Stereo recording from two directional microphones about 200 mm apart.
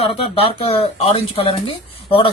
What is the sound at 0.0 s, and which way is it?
Speech, 25° left (ahead or behind).